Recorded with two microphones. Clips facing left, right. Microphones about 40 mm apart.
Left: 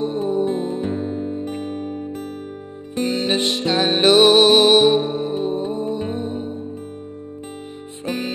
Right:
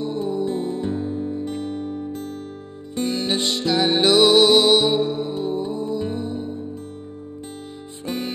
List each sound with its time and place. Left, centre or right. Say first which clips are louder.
0.0 s music: left 3 dB; left
8.0 s music: left 2 dB; left